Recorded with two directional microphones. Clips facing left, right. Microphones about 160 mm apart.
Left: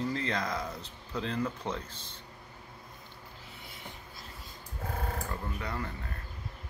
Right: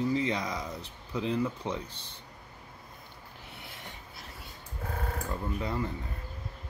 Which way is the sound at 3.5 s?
75° right (ahead or behind).